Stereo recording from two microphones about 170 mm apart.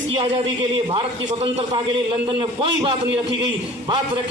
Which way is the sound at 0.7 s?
30° right (ahead or behind).